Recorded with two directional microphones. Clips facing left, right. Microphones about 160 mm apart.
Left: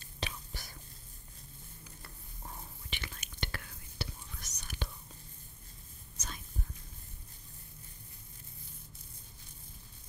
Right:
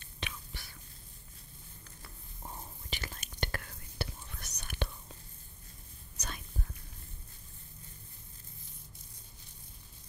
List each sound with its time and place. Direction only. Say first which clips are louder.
0.0 s whispering: left 3 dB; 35° left (ahead or behind)
2.9 s whispering: right 2 dB; 40° right (ahead or behind); by 4.8 s 60° right (ahead or behind)
6.1 s whispering: right 2 dB; 65° right (ahead or behind)